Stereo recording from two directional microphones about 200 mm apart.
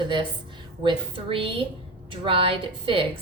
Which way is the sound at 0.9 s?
25° right (ahead or behind).